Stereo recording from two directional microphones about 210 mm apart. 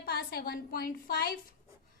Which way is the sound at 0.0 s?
50° left (ahead or behind).